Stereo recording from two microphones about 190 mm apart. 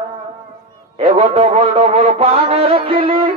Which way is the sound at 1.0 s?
30° right (ahead or behind).